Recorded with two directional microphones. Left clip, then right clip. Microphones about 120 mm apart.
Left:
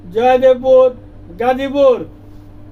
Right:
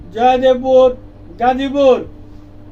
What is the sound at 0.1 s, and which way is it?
Speech, 25° left (ahead or behind).